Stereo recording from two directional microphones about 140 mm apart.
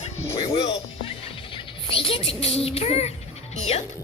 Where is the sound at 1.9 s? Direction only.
40° left (ahead or behind).